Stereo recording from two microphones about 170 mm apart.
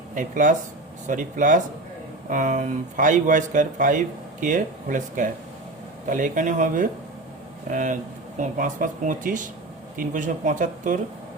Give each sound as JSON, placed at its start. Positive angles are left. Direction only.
{"t": 0.1, "sound": "speech", "side_deg": -50}